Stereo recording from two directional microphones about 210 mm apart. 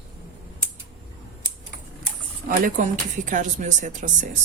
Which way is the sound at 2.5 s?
40° right (ahead or behind).